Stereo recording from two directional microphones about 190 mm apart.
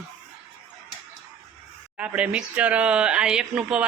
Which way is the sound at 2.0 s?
5° right (ahead or behind).